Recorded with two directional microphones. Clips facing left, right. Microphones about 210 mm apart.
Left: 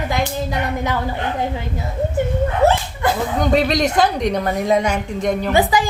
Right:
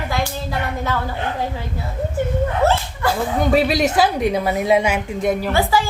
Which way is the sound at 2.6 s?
20° left (ahead or behind).